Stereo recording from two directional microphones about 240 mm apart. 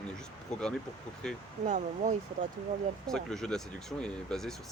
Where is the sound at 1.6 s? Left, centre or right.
Right.